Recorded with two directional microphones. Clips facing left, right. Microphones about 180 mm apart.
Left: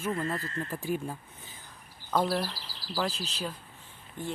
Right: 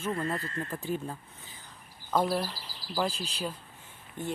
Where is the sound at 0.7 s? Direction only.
10° left (ahead or behind).